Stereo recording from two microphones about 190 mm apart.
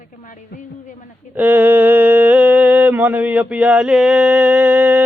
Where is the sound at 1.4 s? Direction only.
10° right (ahead or behind).